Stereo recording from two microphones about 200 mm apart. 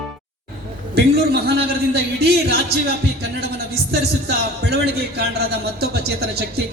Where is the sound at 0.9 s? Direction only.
55° right (ahead or behind).